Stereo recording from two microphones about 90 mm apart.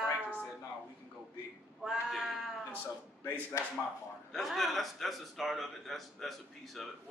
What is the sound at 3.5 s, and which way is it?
Speech, 45° left (ahead or behind).